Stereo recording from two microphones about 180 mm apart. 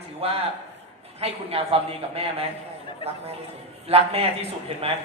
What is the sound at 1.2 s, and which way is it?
A man's voice, 35° right (ahead or behind).